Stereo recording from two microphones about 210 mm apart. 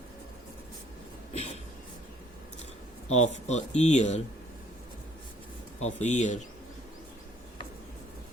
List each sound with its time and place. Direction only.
1.3 s a sound: 30° left (ahead or behind)
3.2 s speech: 35° left (ahead or behind)
5.8 s speech: 35° left (ahead or behind)